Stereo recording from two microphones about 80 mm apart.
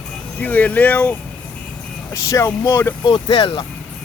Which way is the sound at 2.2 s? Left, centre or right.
Left.